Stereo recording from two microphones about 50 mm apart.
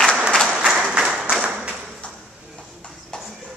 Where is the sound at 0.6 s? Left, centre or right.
Centre.